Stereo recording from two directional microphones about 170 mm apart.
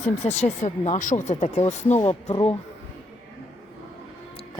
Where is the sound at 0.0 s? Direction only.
40° left (ahead or behind).